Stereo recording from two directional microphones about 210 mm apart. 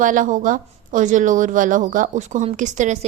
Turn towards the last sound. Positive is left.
turn(degrees=-35)  # may be behind; listen again after turning